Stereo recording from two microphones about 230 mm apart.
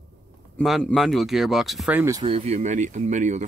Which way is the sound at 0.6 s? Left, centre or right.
Centre.